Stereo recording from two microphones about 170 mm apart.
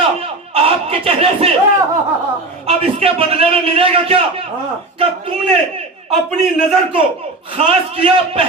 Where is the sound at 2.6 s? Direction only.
35° right (ahead or behind).